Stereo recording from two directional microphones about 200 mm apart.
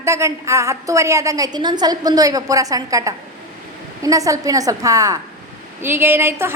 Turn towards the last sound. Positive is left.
turn(degrees=-10)  # may be behind; listen again after turning